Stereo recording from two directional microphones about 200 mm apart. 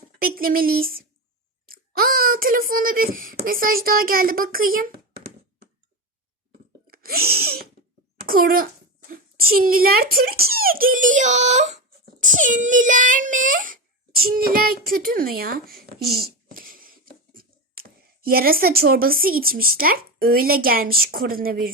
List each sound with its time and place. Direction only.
0.2 s a child's voice: 45° right (ahead or behind)
6.8 s sneeze: 45° right (ahead or behind)
8.2 s a child's voice: 45° right (ahead or behind)